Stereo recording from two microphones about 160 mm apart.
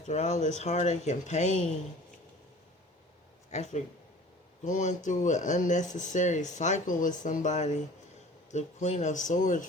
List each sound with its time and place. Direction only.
0.0 s speech: 45° left (ahead or behind)
3.5 s speech: 45° left (ahead or behind)